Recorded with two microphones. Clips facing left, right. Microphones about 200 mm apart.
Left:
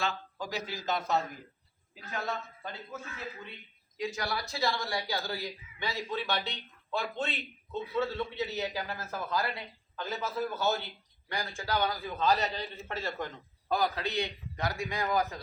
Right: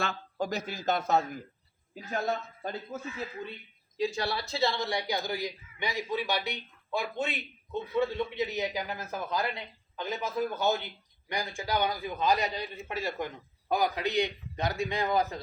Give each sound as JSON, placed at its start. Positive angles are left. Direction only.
{"t": 0.0, "sound": "speech", "side_deg": -55}
{"t": 3.9, "sound": "speech", "side_deg": -30}